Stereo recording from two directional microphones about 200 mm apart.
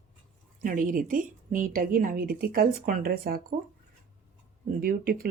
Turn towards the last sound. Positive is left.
turn(degrees=-45)  # may be behind; listen again after turning